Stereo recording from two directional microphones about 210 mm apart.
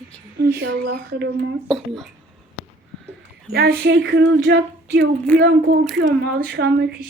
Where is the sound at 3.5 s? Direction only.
50° right (ahead or behind).